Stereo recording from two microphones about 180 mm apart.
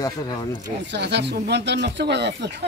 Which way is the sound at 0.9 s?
70° right (ahead or behind).